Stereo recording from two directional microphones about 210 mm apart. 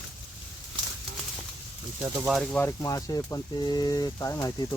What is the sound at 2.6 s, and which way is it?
Speech, 15° left (ahead or behind).